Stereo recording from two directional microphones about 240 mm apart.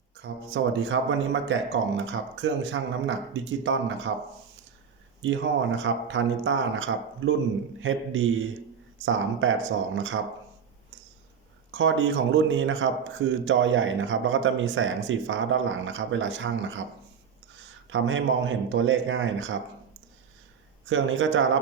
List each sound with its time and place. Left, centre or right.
0.2 s a man's voice: right
5.2 s a man's voice: right
11.7 s a man's voice: right
17.8 s a man's voice: right
20.8 s a man's voice: right